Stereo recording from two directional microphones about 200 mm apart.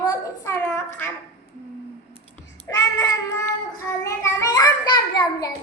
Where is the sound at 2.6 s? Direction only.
15° left (ahead or behind).